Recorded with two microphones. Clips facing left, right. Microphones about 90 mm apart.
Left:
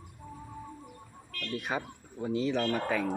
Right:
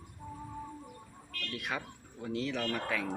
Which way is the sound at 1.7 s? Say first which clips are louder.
Left 4 dB; 20° left (ahead or behind).